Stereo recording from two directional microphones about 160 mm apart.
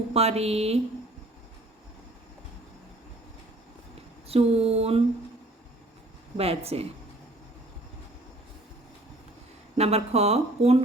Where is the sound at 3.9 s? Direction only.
40° right (ahead or behind).